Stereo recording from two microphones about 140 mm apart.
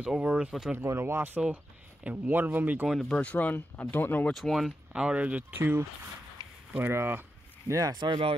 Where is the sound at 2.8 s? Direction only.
Centre (ahead or behind).